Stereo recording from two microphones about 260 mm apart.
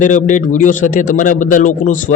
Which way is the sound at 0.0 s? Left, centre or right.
Left.